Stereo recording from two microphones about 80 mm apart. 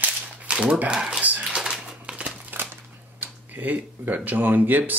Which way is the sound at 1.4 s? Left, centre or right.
Centre.